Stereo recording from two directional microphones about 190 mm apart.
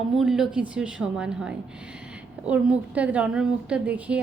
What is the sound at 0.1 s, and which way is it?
A woman's voice, centre (ahead or behind).